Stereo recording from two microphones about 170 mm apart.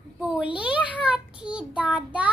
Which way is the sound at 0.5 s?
5° right (ahead or behind).